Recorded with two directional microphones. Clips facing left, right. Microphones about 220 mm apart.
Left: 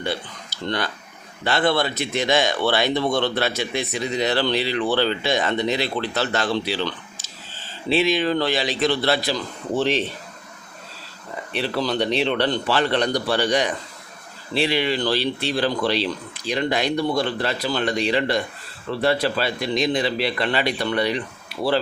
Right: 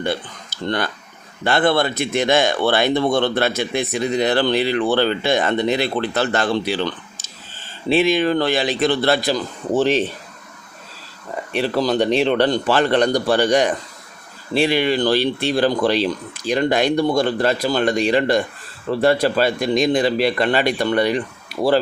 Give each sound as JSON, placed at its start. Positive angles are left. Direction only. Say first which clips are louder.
{"t": 0.0, "sound": "speech", "louder": "right 4 dB", "side_deg": -50}
{"t": 11.5, "sound": "speech", "louder": "right 5 dB", "side_deg": -45}